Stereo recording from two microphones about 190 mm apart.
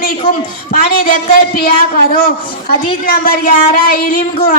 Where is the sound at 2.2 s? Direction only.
50° left (ahead or behind).